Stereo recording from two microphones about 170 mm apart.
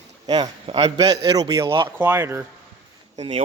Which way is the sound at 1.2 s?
20° right (ahead or behind).